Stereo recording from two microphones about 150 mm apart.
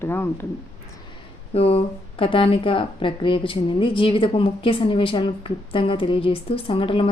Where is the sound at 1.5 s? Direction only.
40° left (ahead or behind).